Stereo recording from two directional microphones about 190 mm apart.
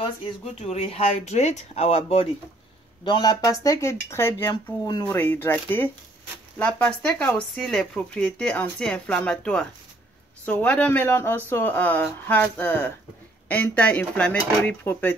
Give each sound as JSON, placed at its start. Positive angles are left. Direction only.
{"t": 0.6, "sound": "speech", "side_deg": 30}